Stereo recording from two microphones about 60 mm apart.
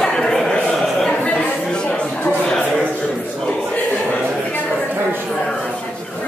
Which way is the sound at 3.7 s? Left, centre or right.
Left.